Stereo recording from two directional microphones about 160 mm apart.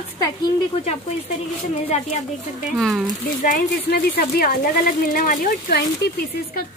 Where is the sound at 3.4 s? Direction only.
65° left (ahead or behind).